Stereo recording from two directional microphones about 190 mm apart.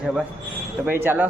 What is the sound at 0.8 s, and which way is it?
Speech, 10° right (ahead or behind).